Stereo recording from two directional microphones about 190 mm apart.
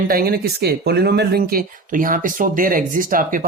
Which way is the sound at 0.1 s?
55° right (ahead or behind).